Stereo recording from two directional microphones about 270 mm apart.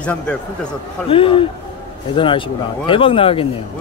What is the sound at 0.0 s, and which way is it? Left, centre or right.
Speech, centre.